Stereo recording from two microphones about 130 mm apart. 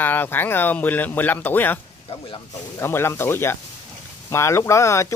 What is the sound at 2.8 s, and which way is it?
Speech, 20° left (ahead or behind).